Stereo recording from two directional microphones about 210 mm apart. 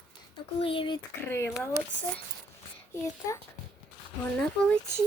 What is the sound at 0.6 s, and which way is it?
Speech, 25° left (ahead or behind).